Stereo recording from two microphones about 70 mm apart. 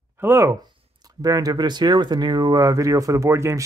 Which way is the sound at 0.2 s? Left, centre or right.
Right.